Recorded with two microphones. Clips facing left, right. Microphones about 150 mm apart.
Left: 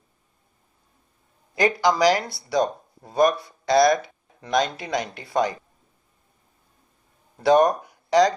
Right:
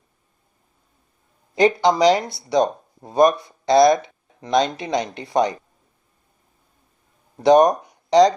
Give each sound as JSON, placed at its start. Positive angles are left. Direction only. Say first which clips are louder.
{"t": 1.5, "sound": "speech", "louder": "right 4 dB", "side_deg": -25}
{"t": 7.3, "sound": "speech", "louder": "right 4 dB", "side_deg": -20}